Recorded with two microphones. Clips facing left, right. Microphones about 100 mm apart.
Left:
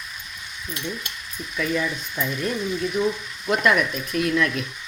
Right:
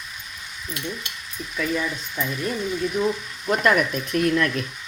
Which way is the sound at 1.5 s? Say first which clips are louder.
Left 1 dB; 5° right (ahead or behind).